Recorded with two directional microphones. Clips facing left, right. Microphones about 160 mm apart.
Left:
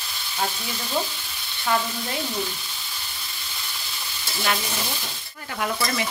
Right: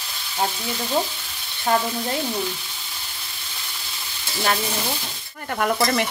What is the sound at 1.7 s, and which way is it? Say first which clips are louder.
Frying: right 3 dB; 40° right (ahead or behind).